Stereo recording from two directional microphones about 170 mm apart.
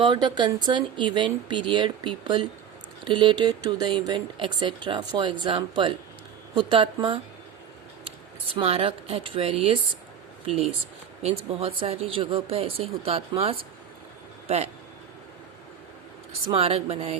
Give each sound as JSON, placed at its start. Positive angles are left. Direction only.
{"t": 0.0, "sound": "speech", "side_deg": -25}
{"t": 8.5, "sound": "speech", "side_deg": -35}
{"t": 16.5, "sound": "speech", "side_deg": -35}